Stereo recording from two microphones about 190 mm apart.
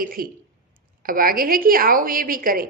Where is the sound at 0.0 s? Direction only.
50° right (ahead or behind).